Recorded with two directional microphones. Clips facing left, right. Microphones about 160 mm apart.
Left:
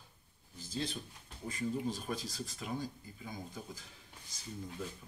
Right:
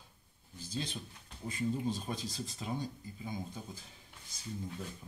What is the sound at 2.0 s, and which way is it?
Speech, 20° right (ahead or behind).